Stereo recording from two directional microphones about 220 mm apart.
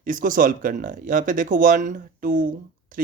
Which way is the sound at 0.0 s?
40° right (ahead or behind).